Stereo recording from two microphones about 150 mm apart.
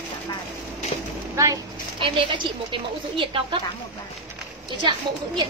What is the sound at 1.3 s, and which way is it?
Speech, 20° right (ahead or behind).